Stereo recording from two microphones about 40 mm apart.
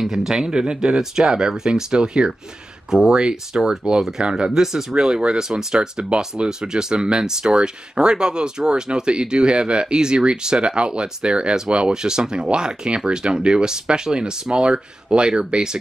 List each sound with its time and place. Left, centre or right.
0.0 s speech: centre
5.8 s speech: right